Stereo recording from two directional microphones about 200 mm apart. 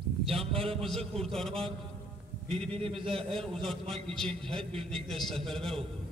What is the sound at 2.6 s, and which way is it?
Speech, 30° right (ahead or behind).